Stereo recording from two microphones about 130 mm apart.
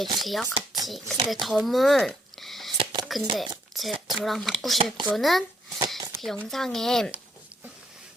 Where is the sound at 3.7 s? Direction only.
Centre (ahead or behind).